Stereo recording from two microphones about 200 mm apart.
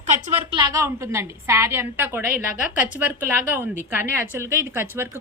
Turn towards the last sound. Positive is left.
turn(degrees=-10)  # may be behind; listen again after turning